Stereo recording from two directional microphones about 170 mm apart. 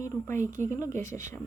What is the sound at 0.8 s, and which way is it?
Speech, 45° right (ahead or behind).